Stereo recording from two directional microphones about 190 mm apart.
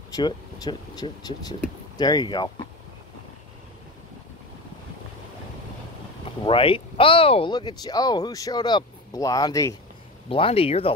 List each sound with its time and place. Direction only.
0.1 s speech: 20° left (ahead or behind)
6.4 s speech: 30° left (ahead or behind)
10.3 s speech: 30° left (ahead or behind)